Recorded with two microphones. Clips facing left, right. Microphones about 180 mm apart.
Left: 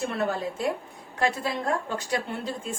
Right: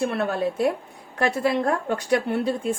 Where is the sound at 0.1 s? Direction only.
60° right (ahead or behind).